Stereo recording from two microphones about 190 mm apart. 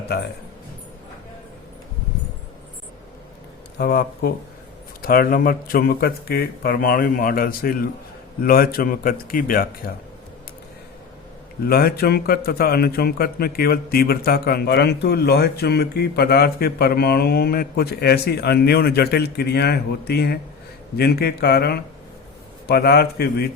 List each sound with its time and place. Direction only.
3.8 s speech: 55° left (ahead or behind)
11.6 s speech: 55° left (ahead or behind)